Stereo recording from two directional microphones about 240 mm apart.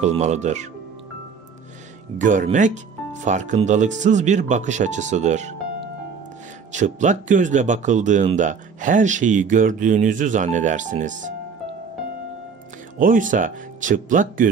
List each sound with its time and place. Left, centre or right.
0.0 s speech: right
2.1 s speech: right
6.7 s speech: right
13.0 s speech: right